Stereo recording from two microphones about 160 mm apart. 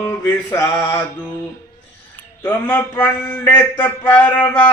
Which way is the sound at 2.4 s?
10° left (ahead or behind).